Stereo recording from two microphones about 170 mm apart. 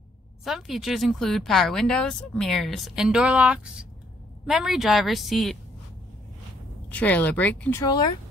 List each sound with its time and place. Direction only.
0.4 s speech: centre (ahead or behind)
6.9 s speech: 10° left (ahead or behind)
7.8 s speech: 25° left (ahead or behind)